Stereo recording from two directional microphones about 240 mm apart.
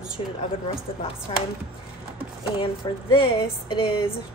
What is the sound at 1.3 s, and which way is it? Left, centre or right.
Speech, left.